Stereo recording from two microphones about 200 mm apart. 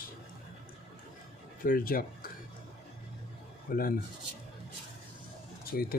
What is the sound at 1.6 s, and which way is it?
Speech, 45° left (ahead or behind).